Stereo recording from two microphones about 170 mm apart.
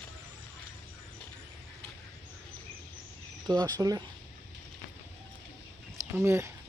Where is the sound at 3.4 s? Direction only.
20° right (ahead or behind).